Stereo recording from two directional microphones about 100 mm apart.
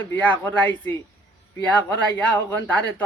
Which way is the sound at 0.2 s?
15° left (ahead or behind).